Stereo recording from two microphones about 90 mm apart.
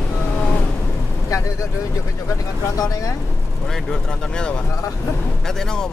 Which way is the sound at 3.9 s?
10° left (ahead or behind).